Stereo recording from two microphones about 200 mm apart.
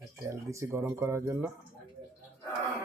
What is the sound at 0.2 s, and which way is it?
Speech, 15° right (ahead or behind).